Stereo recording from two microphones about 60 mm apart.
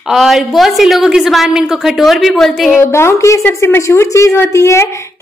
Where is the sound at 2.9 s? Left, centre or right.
Left.